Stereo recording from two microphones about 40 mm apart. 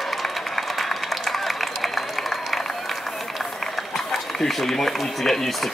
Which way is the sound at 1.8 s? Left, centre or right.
Centre.